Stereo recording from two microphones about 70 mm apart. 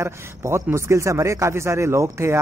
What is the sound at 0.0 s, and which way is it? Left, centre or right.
Speech, right.